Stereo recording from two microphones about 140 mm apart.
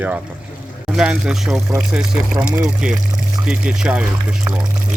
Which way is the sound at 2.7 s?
5° right (ahead or behind).